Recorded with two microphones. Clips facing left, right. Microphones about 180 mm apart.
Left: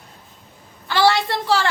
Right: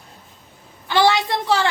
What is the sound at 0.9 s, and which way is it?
Speech, 20° right (ahead or behind).